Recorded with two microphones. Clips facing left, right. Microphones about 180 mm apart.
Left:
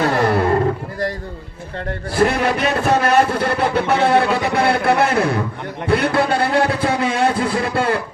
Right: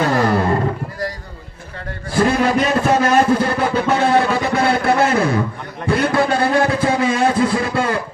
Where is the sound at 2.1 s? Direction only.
65° left (ahead or behind).